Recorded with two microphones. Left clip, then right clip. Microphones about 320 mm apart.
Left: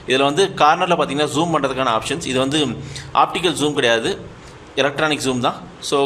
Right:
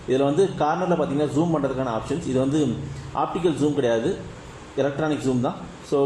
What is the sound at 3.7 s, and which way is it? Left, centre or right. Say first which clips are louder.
A man's voice: left 5 dB; left.